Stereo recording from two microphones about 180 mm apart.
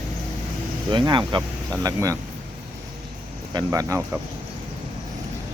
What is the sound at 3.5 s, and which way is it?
Speech, 20° right (ahead or behind).